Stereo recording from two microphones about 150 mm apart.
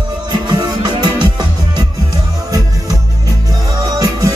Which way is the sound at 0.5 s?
25° right (ahead or behind).